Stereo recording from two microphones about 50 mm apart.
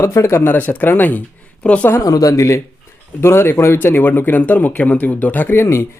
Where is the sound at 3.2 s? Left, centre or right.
Left.